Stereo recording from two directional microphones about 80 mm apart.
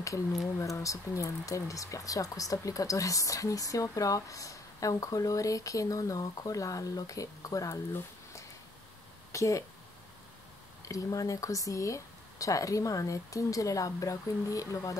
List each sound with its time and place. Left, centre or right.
0.6 s speech: left
7.9 s a sound: left
9.3 s speech: left
10.9 s speech: left